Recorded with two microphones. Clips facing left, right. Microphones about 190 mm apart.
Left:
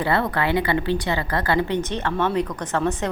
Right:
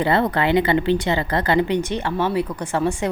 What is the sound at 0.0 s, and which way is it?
A woman's voice, 20° right (ahead or behind).